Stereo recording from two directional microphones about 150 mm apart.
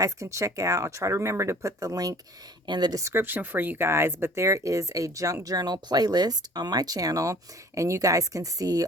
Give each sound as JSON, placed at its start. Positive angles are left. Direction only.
{"t": 0.0, "sound": "speech", "side_deg": -20}